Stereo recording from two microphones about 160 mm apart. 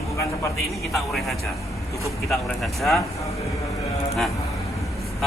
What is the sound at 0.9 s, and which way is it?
Speech, centre (ahead or behind).